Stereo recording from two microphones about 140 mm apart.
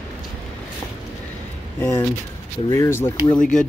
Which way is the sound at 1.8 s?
15° left (ahead or behind).